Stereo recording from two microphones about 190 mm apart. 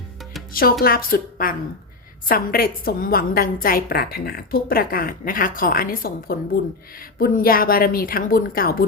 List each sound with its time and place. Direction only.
0.5 s a woman's voice: 50° left (ahead or behind)